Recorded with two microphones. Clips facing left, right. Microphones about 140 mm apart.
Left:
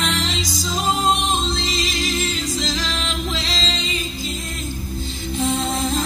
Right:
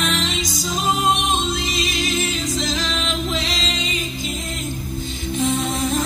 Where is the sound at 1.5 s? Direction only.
20° right (ahead or behind).